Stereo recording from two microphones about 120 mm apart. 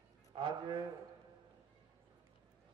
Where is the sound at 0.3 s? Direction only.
40° right (ahead or behind).